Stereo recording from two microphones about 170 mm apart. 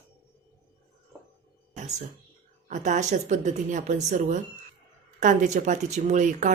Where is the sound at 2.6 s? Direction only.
45° right (ahead or behind).